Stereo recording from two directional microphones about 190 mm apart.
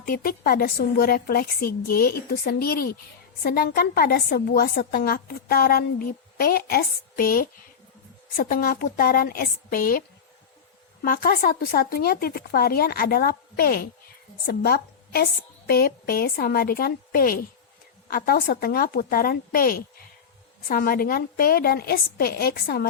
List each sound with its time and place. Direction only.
0.0 s a woman's voice: 50° left (ahead or behind)
11.0 s a woman's voice: 50° left (ahead or behind)